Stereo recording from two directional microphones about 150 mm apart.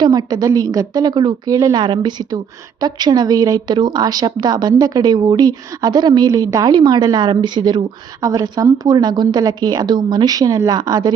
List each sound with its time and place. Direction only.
0.0 s a woman's voice: 25° right (ahead or behind)